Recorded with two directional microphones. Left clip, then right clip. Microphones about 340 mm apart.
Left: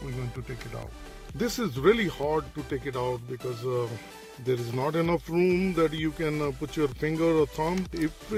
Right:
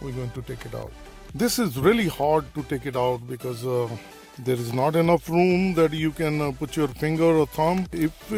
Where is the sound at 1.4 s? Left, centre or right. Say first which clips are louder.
Right 4 dB; right.